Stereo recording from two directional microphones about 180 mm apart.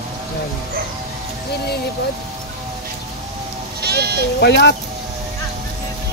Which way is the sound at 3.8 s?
65° right (ahead or behind).